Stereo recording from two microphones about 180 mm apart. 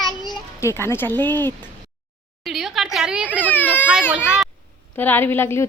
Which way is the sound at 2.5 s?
Centre (ahead or behind).